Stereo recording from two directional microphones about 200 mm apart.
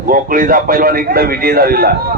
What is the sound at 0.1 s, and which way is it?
A man's voice, 45° right (ahead or behind).